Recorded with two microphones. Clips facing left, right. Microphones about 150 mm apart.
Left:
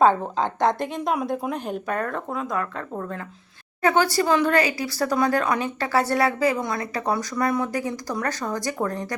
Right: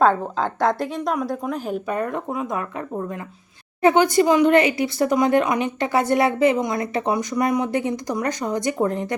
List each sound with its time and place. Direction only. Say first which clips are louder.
0.0 s a woman's voice: even; 5° right (ahead or behind); by 9.1 s 20° right (ahead or behind)